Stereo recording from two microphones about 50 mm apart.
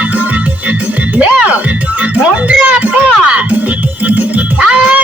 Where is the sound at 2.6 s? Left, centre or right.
Right.